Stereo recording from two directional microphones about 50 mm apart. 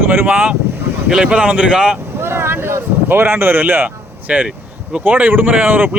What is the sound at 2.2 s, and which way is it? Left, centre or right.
Speech, right.